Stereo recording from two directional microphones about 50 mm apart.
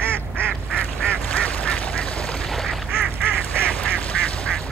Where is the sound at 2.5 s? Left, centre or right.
Centre.